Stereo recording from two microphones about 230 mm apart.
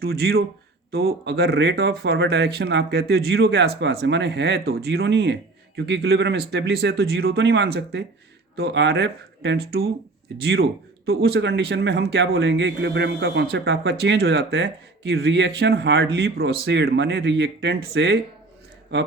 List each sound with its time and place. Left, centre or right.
0.0 s speech: right